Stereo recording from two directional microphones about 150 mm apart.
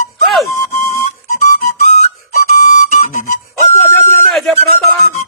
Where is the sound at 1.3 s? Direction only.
60° left (ahead or behind).